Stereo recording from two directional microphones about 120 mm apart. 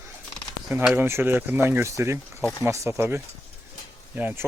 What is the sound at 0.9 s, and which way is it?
Speech, 20° right (ahead or behind).